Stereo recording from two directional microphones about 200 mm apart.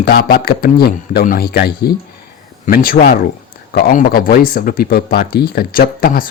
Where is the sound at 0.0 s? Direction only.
50° left (ahead or behind).